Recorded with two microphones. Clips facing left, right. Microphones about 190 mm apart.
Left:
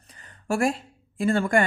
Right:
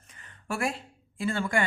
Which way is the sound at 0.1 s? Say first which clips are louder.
Left 7 dB; 35° left (ahead or behind).